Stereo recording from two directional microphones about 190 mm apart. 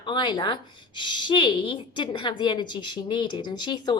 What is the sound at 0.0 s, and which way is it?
A woman's voice, 25° left (ahead or behind).